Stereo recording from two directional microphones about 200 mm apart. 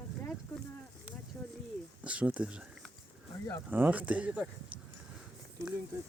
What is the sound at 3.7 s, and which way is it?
Speech, 10° right (ahead or behind).